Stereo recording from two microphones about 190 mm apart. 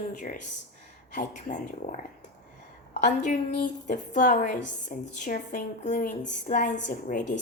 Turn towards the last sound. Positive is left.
turn(degrees=40)  # may be behind; listen again after turning